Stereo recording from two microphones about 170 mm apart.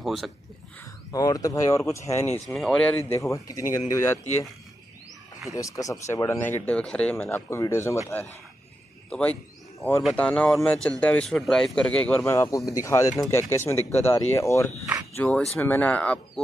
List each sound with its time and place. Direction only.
0.0 s speech: centre (ahead or behind)
1.1 s speech: 20° left (ahead or behind)
2.5 s speech: 5° left (ahead or behind)
3.4 s speech: 20° left (ahead or behind)
5.5 s speech: 20° left (ahead or behind)
9.1 s speech: 5° left (ahead or behind)
15.1 s speech: 5° left (ahead or behind)